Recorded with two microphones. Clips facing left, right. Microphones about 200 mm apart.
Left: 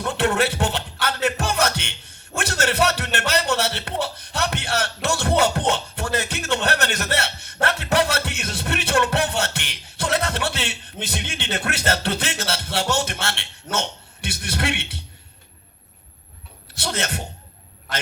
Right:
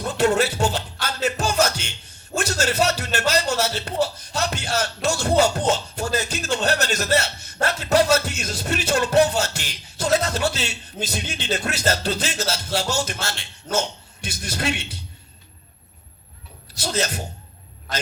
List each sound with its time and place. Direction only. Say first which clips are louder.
0.0 s music: right 2 dB; 60° left (ahead or behind)
5.0 s speech: right 1 dB; 60° left (ahead or behind)
16.7 s speech: right 2 dB; 60° left (ahead or behind)